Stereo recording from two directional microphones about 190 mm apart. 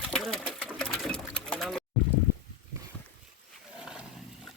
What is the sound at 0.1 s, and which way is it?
Sewing machine, centre (ahead or behind).